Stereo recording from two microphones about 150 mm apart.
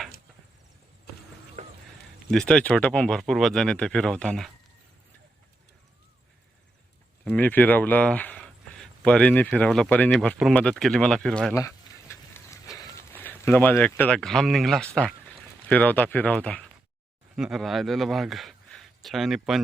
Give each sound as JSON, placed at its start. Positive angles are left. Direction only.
{"t": 2.3, "sound": "speech", "side_deg": 5}
{"t": 7.3, "sound": "speech", "side_deg": 10}
{"t": 11.5, "sound": "a sound", "side_deg": 20}
{"t": 12.7, "sound": "horse", "side_deg": 20}
{"t": 13.1, "sound": "a man's voice", "side_deg": 10}